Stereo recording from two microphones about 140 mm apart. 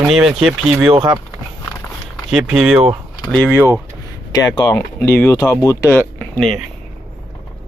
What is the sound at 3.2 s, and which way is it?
Speech, 10° left (ahead or behind).